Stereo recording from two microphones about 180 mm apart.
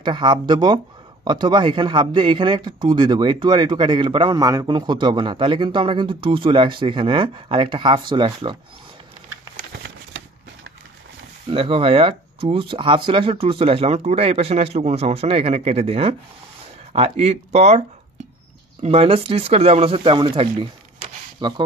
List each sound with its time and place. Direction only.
0.0 s a man's voice: 25° right (ahead or behind)
11.5 s speech: 30° right (ahead or behind)